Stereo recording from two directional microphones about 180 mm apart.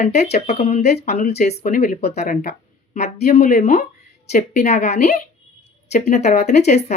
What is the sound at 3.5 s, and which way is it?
Speech, 40° left (ahead or behind).